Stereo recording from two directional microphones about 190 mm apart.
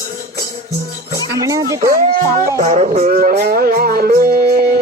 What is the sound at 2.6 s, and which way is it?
Music, 40° right (ahead or behind).